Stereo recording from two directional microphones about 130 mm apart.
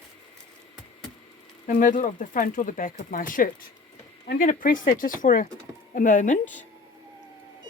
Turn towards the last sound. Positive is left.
turn(degrees=70)  # may be behind; listen again after turning